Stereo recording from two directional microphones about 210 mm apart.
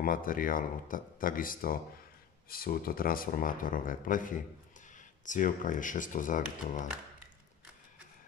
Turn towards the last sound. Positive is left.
turn(degrees=40)  # may be behind; listen again after turning